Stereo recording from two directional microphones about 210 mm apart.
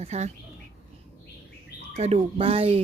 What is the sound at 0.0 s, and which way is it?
Speech, 30° right (ahead or behind).